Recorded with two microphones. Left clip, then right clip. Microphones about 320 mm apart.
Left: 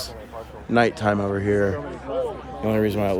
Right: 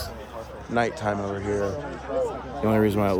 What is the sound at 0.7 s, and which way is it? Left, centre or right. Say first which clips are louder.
Speech: left 5 dB; left.